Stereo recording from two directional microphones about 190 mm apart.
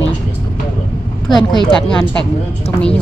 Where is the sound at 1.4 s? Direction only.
25° left (ahead or behind).